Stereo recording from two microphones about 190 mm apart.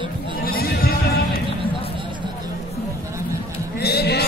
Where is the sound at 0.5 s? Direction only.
50° left (ahead or behind).